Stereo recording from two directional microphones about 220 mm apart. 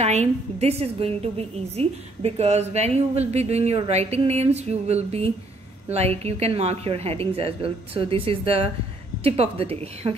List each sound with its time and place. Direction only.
0.0 s a woman's voice: 30° right (ahead or behind)